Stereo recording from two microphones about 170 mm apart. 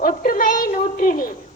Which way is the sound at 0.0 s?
55° left (ahead or behind).